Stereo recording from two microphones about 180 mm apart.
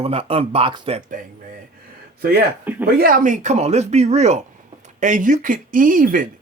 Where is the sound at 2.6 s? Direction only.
10° right (ahead or behind).